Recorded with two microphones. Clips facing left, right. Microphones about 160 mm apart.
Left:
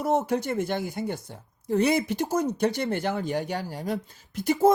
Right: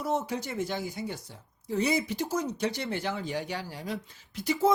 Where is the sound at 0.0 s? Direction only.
55° left (ahead or behind).